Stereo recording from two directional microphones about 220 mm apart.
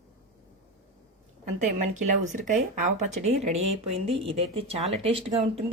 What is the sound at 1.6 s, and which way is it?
Speech, 35° right (ahead or behind).